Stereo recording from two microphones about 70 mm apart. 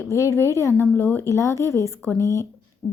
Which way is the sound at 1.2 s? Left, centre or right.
Left.